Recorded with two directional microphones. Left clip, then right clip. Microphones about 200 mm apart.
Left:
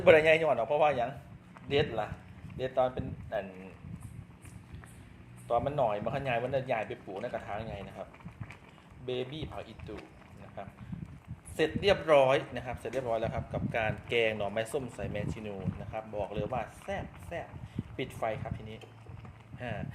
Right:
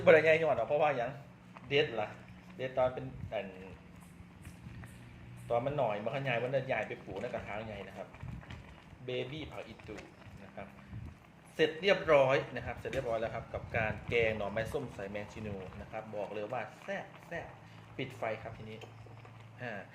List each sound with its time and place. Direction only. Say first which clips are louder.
0.0 s a man's voice: left 2 dB; 35° left (ahead or behind)
5.5 s a man's voice: left 3 dB; 35° left (ahead or behind)
11.5 s a man's voice: left 2 dB; 35° left (ahead or behind)